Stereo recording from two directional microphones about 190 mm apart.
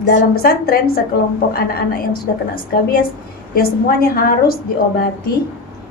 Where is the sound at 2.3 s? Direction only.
60° left (ahead or behind).